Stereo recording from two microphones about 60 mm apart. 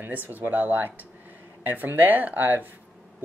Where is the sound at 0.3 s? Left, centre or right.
Right.